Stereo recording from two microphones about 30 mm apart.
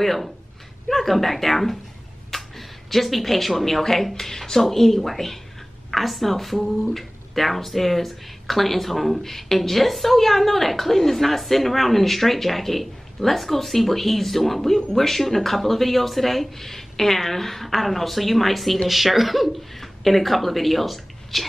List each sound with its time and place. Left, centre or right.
0.0 s a woman's voice: centre